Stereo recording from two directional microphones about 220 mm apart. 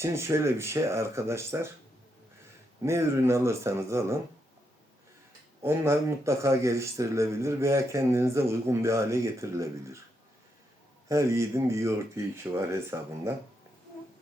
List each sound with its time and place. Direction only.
0.0 s speech: 10° right (ahead or behind)
2.8 s speech: 10° right (ahead or behind)
5.6 s speech: 10° right (ahead or behind)
11.1 s speech: 15° right (ahead or behind)